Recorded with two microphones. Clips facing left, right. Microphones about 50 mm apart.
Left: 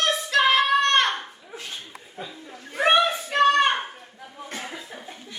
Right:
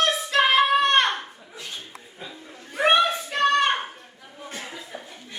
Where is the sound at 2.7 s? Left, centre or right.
Centre.